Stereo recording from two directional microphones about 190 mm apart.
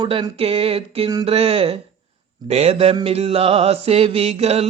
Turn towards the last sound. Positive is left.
turn(degrees=-30)  # may be behind; listen again after turning